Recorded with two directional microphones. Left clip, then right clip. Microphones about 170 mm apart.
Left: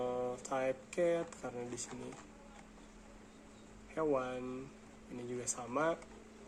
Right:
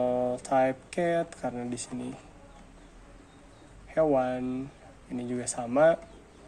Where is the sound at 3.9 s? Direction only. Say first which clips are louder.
Right 11 dB; 35° right (ahead or behind).